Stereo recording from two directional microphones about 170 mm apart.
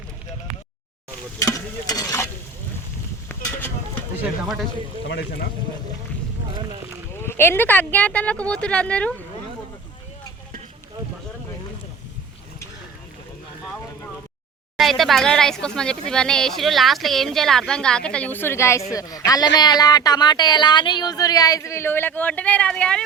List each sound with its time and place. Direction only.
1.4 s speech: 20° left (ahead or behind)
3.2 s a sound: 10° left (ahead or behind)
4.2 s speech: centre (ahead or behind)
7.2 s speech: 15° left (ahead or behind)
14.8 s speech: centre (ahead or behind)